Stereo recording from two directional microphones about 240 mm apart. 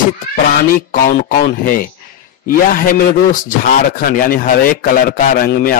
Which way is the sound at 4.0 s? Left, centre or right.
Left.